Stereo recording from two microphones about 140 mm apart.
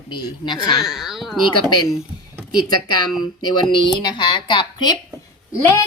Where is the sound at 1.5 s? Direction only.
30° left (ahead or behind).